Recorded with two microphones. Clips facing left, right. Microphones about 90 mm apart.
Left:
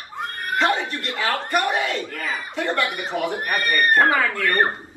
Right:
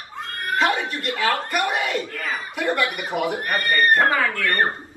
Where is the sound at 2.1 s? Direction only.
25° left (ahead or behind).